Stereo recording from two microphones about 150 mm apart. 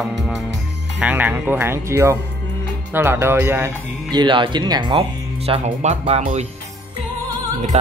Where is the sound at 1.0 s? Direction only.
10° right (ahead or behind).